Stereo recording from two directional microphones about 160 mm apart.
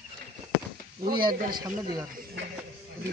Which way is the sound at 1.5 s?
25° right (ahead or behind).